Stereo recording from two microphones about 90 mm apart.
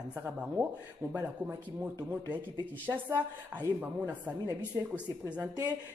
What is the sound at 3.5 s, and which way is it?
Speech, 20° right (ahead or behind).